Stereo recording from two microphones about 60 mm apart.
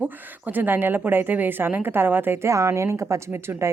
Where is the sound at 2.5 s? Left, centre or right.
Right.